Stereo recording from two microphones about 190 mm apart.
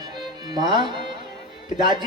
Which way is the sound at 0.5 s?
25° right (ahead or behind).